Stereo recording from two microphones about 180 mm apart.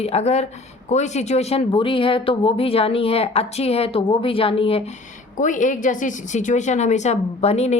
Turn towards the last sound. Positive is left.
turn(degrees=35)  # may be behind; listen again after turning